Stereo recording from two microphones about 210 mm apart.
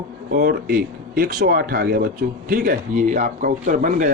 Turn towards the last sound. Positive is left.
turn(degrees=-40)  # may be behind; listen again after turning